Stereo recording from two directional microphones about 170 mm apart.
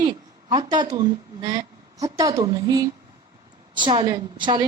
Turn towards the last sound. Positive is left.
turn(degrees=-25)  # may be behind; listen again after turning